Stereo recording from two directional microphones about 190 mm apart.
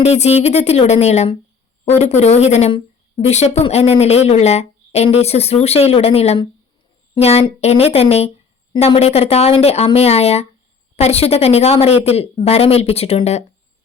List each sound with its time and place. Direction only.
0.0 s speech: 35° left (ahead or behind)